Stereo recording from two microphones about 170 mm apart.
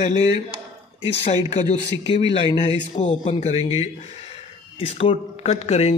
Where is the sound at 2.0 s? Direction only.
30° left (ahead or behind).